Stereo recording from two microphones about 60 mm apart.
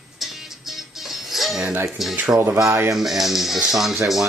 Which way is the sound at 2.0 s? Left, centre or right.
Centre.